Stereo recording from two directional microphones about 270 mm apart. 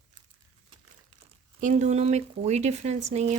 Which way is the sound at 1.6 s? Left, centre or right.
Right.